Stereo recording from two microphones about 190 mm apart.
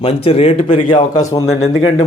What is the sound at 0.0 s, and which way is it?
A man's voice, 30° left (ahead or behind).